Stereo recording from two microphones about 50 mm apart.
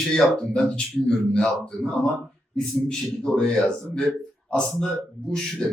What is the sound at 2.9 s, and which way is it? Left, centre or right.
A man's voice, centre.